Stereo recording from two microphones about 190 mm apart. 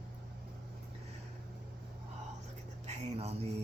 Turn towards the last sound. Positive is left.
turn(degrees=-35)  # may be behind; listen again after turning